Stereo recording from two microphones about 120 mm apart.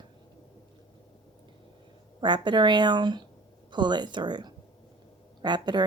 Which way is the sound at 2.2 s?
40° right (ahead or behind).